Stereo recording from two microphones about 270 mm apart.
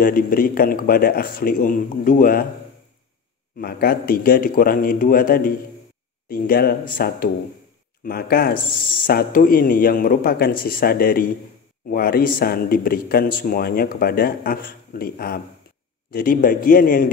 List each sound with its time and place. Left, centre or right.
0.0 s speech: left
3.5 s speech: left